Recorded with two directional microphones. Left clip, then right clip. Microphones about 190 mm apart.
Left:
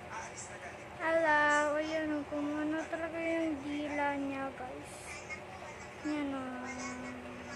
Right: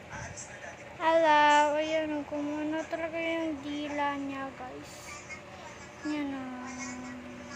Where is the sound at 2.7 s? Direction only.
10° right (ahead or behind).